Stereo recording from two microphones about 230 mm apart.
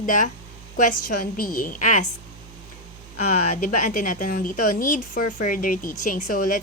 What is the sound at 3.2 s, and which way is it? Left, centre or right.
Speech, left.